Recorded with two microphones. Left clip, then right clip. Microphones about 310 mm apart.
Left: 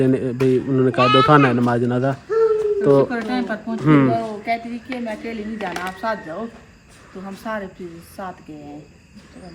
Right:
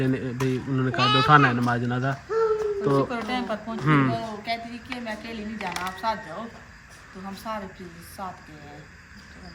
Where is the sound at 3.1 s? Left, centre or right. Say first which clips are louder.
Left 4 dB; right.